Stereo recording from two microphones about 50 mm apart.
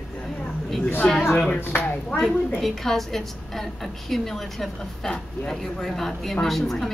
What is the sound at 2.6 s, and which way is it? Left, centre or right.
A woman's voice, centre.